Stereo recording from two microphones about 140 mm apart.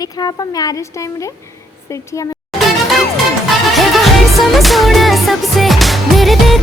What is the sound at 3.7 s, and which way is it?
Music, centre (ahead or behind).